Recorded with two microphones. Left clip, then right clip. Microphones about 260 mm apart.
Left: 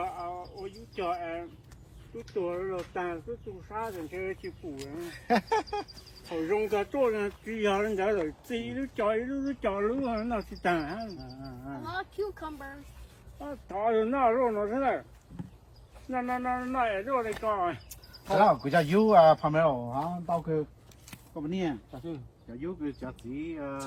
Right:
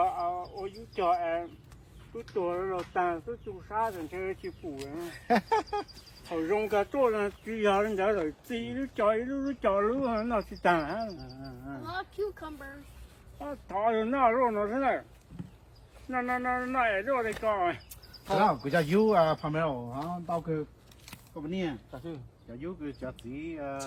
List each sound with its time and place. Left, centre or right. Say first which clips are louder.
0.0 s a sound: right 6 dB; right
2.1 s speech: right 1 dB; centre
3.8 s speech: right 3 dB; centre
4.1 s speech: even; centre
4.6 s speech: right 1 dB; centre
6.3 s speech: right 1 dB; centre
11.2 s cricket: left 1 dB; left
13.4 s speech: right 1 dB; right
16.0 s speech: right 1 dB; right
18.1 s a man's voice: left 3 dB; centre
21.9 s speech: left 1 dB; centre
22.4 s speech: left 3 dB; centre